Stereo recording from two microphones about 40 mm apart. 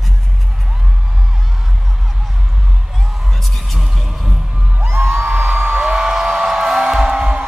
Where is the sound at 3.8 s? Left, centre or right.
Centre.